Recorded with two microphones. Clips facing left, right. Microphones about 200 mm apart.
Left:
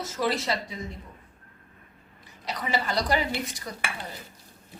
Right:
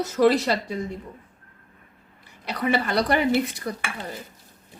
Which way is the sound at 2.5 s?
65° right (ahead or behind).